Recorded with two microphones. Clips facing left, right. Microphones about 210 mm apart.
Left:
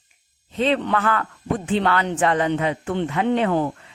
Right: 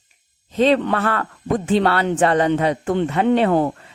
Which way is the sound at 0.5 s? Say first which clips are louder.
Right 4 dB; 40° right (ahead or behind).